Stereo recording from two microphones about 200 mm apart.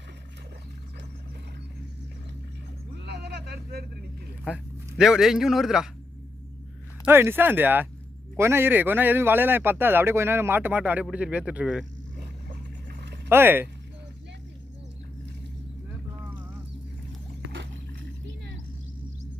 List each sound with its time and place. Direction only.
2.9 s a sound: 55° right (ahead or behind)
4.4 s a man's voice: 5° right (ahead or behind)
7.0 s speech: 10° right (ahead or behind)
12.5 s boat: 55° right (ahead or behind)
13.2 s speech: 10° right (ahead or behind)